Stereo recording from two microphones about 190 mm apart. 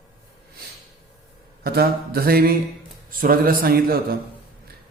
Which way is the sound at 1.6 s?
55° right (ahead or behind).